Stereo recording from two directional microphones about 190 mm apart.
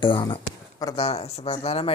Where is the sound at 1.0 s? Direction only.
30° left (ahead or behind).